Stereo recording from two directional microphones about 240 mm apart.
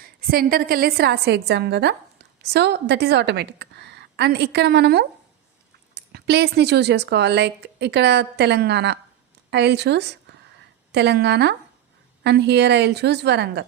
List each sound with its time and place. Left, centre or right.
0.0 s speech: right